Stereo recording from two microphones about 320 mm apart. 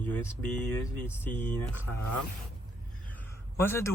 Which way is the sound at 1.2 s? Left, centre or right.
Centre.